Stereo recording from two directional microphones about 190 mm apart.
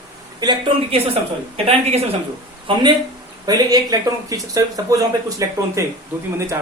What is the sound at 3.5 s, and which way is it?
Speech, 20° right (ahead or behind).